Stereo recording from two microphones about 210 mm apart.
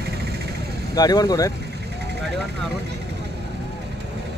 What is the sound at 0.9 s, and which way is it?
Speech, 20° left (ahead or behind).